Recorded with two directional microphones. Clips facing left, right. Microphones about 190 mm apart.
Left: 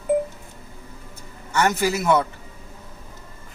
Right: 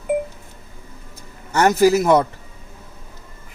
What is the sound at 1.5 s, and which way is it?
Speech, 40° right (ahead or behind).